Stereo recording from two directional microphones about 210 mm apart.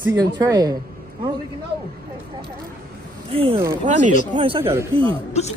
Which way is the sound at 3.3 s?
25° right (ahead or behind).